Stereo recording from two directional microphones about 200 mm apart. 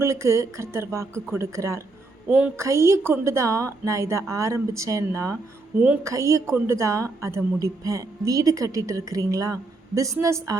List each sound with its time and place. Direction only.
0.0 s a woman's voice: 15° right (ahead or behind)